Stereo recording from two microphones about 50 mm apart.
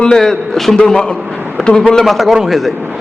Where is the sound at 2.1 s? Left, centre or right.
Centre.